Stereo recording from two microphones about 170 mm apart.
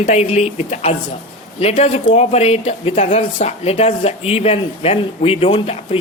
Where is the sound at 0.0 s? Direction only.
40° left (ahead or behind).